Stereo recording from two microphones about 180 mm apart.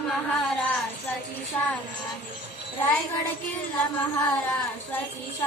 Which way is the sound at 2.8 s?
10° left (ahead or behind).